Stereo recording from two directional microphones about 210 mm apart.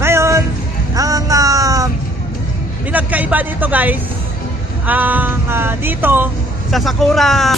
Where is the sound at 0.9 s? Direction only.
15° right (ahead or behind).